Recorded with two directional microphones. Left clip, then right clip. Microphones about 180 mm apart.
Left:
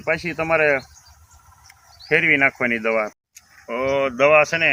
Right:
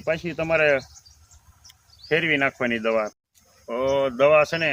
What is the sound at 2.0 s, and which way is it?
Speech, 10° right (ahead or behind).